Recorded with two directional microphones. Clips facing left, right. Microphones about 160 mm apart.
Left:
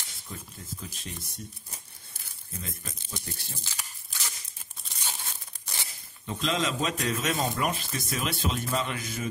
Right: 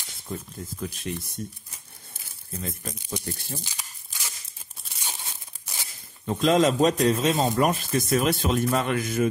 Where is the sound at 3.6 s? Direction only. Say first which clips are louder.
Right 1 dB; 15° right (ahead or behind).